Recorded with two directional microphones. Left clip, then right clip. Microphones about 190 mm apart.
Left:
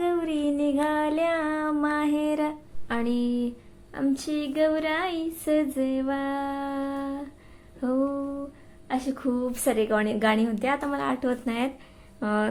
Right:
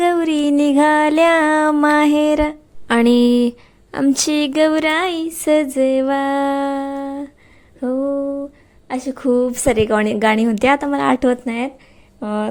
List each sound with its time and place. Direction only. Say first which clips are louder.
0.0 s a sound: right 10 dB; 55° right (ahead or behind)
2.8 s speech: right 14 dB; 60° right (ahead or behind); by 7.3 s 40° right (ahead or behind)
7.8 s a sound: right 7 dB; 35° right (ahead or behind)
8.9 s speech: right 10 dB; 45° right (ahead or behind)
11.4 s speech: right 6 dB; 30° right (ahead or behind)
12.2 s speech: right 4 dB; 20° right (ahead or behind)